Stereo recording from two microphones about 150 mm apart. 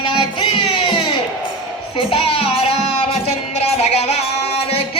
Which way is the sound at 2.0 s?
40° left (ahead or behind).